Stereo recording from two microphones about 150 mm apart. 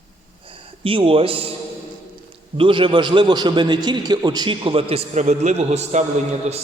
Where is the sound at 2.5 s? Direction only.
35° right (ahead or behind).